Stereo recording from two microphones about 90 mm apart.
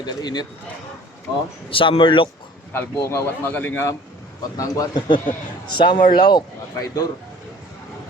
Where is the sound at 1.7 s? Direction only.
70° left (ahead or behind).